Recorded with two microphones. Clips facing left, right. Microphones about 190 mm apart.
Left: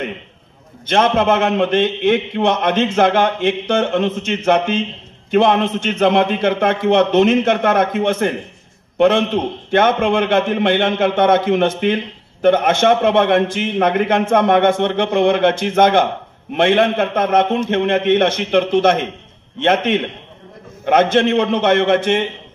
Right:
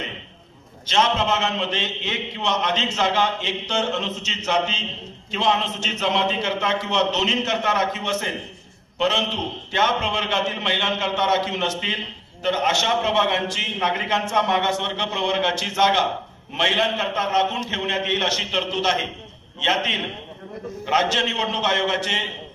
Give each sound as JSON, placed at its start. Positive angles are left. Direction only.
{"t": 0.8, "sound": "a man's voice", "side_deg": 55}